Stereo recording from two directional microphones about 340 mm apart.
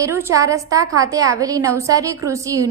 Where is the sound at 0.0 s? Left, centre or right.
Centre.